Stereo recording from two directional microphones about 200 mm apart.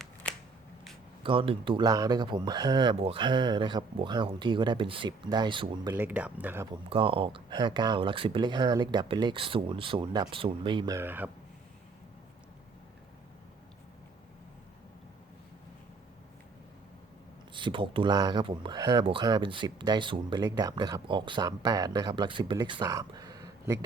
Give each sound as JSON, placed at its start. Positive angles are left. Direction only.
{"t": 0.0, "sound": "scissors", "side_deg": 5}
{"t": 1.2, "sound": "speech", "side_deg": -25}
{"t": 5.9, "sound": "speech", "side_deg": -10}
{"t": 6.9, "sound": "speech", "side_deg": -25}
{"t": 17.5, "sound": "speech", "side_deg": -25}